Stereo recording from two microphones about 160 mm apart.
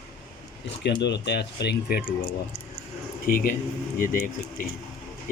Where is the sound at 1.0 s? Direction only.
90° left; by 2.3 s 70° left (ahead or behind).